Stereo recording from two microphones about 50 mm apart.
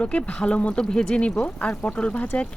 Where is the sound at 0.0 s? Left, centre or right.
Left.